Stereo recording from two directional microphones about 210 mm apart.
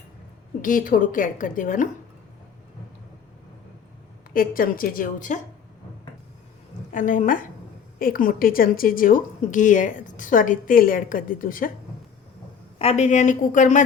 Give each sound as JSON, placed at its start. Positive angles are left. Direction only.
{"t": 0.6, "sound": "a woman's voice", "side_deg": 40}
{"t": 4.4, "sound": "a woman's voice", "side_deg": 45}
{"t": 6.9, "sound": "a woman's voice", "side_deg": 40}
{"t": 12.8, "sound": "a woman's voice", "side_deg": 30}